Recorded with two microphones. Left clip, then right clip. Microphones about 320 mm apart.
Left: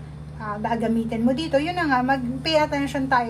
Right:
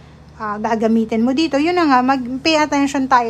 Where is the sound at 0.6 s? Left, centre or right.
Centre.